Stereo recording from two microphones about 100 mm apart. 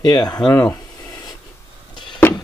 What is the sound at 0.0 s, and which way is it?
Speech, 45° left (ahead or behind).